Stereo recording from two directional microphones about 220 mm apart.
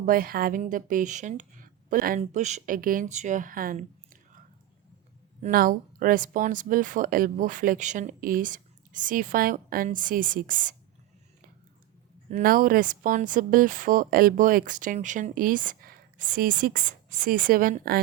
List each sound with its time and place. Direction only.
0.0 s speech: 40° right (ahead or behind)
5.4 s speech: 40° right (ahead or behind)
12.3 s speech: 40° right (ahead or behind)